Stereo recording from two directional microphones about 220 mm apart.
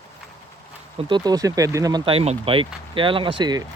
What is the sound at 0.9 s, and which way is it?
Speech, 20° right (ahead or behind).